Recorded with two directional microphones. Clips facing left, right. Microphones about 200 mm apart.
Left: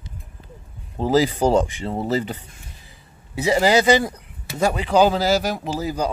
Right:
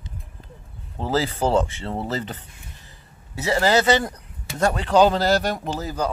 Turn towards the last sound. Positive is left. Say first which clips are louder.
# left 2 dB
turn(degrees=10)  # may be behind; listen again after turning